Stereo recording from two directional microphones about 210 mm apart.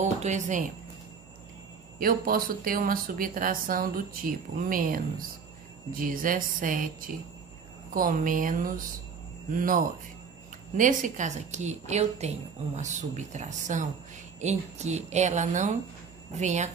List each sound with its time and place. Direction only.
0.0 s a woman's voice: 35° right (ahead or behind)
2.0 s a woman's voice: 45° right (ahead or behind)
10.8 s a woman's voice: 40° right (ahead or behind)